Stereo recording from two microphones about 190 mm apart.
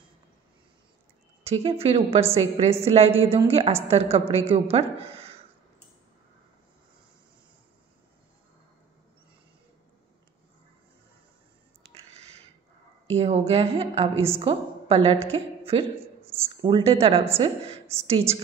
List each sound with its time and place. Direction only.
1.4 s a woman's voice: 30° right (ahead or behind)
13.1 s a woman's voice: 30° right (ahead or behind)
16.0 s a sound: 10° right (ahead or behind)
16.6 s a woman's voice: 30° right (ahead or behind)